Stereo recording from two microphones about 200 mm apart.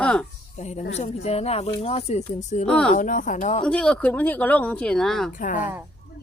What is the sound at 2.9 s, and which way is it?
Speech, 40° left (ahead or behind).